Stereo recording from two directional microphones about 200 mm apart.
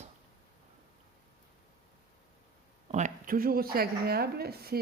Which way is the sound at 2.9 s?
40° right (ahead or behind).